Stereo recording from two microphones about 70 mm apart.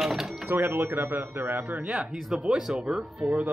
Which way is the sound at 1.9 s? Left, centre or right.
Centre.